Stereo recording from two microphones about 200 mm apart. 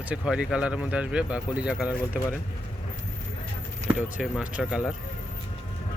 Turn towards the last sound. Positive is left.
turn(degrees=-5)  # may be behind; listen again after turning